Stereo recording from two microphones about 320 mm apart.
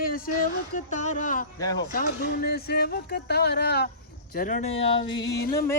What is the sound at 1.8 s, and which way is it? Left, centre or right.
Speech, left.